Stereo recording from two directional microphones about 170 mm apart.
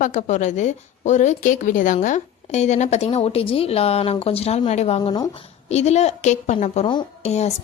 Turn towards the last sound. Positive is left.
turn(degrees=40)  # may be behind; listen again after turning